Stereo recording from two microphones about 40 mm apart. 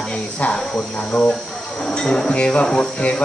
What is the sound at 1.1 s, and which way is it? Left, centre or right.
Cricket, left.